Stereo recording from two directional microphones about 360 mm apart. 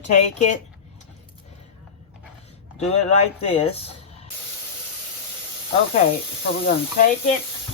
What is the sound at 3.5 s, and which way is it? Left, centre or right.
Speech, centre.